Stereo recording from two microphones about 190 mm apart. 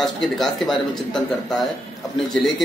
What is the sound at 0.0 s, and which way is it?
A man's voice, centre (ahead or behind).